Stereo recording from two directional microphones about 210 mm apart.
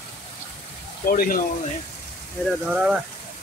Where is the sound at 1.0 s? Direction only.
45° left (ahead or behind).